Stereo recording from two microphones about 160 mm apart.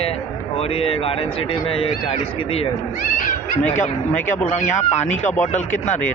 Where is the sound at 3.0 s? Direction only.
55° left (ahead or behind).